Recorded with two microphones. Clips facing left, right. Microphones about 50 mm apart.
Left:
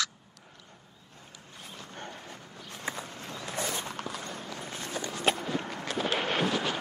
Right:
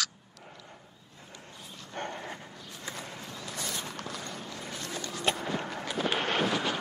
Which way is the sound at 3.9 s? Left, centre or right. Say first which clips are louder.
Left 1 dB; centre.